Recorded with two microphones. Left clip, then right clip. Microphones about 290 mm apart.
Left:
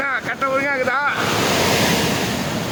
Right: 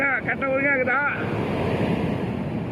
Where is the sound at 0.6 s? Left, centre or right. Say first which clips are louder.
Left 2 dB; centre.